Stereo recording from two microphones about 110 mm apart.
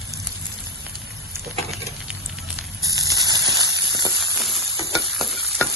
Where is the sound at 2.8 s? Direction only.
30° right (ahead or behind).